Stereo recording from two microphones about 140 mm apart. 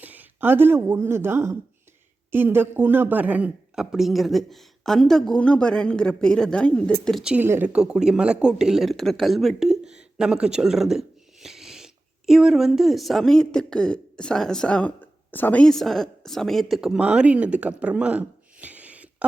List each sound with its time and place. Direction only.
0.0 s a woman's voice: 10° right (ahead or behind)
7.3 s speech: 15° right (ahead or behind)